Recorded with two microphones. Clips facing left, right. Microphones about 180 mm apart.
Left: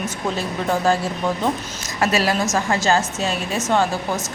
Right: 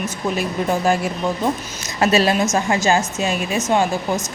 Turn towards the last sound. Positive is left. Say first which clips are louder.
# right 1 dB
turn(degrees=-15)  # may be behind; listen again after turning